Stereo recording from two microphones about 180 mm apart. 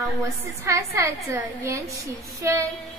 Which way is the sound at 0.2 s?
15° right (ahead or behind).